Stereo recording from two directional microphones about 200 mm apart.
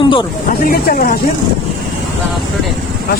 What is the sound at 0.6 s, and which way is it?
Speech, 45° left (ahead or behind).